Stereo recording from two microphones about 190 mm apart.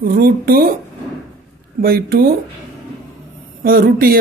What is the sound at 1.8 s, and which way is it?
Speech, 50° right (ahead or behind).